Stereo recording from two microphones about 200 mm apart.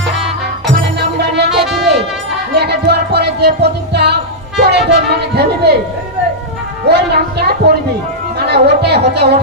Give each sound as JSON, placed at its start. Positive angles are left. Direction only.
{"t": 0.9, "sound": "music", "side_deg": -55}
{"t": 1.6, "sound": "music", "side_deg": 0}
{"t": 2.5, "sound": "music", "side_deg": -55}
{"t": 6.9, "sound": "a sound", "side_deg": -55}
{"t": 8.4, "sound": "music", "side_deg": -55}